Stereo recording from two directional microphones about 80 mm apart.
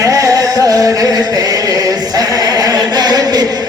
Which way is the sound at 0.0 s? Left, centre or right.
Right.